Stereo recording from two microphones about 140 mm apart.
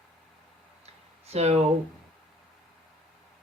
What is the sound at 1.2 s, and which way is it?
Speech, 50° right (ahead or behind).